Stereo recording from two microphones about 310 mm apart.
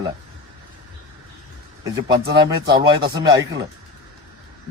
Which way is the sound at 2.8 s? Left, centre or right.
Centre.